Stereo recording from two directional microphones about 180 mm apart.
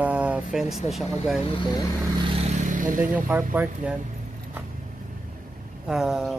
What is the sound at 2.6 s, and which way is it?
Vehicle, 45° right (ahead or behind).